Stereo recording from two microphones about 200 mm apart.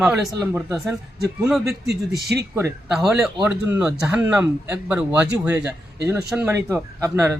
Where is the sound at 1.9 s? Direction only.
55° right (ahead or behind).